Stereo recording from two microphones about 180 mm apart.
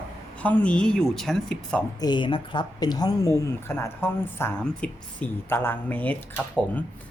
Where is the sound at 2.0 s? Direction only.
25° left (ahead or behind); by 6.1 s 10° left (ahead or behind).